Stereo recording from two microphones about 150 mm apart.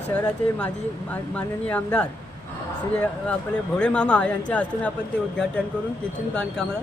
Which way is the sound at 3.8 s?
5° left (ahead or behind).